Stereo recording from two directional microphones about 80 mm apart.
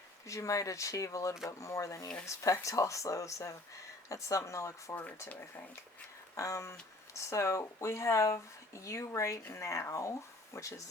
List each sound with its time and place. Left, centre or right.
0.3 s speech: left
5.3 s speech: left
6.3 s speech: left